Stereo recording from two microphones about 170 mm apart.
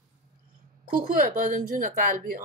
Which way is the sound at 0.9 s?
60° right (ahead or behind).